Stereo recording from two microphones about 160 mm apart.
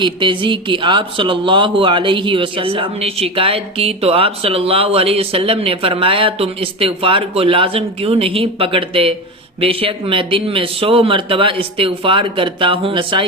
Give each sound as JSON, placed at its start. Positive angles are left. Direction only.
{"t": 0.0, "sound": "speech", "side_deg": -30}